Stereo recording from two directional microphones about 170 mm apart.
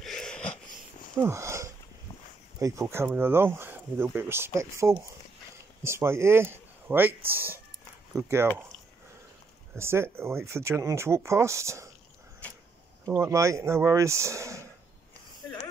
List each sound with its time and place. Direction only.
0.0 s wheeze: 5° left (ahead or behind)
1.2 s a sound: 15° right (ahead or behind)
2.6 s speech: 20° right (ahead or behind)
9.8 s speech: 15° right (ahead or behind)
12.4 s a sound: 10° left (ahead or behind)
13.1 s speech: 15° right (ahead or behind)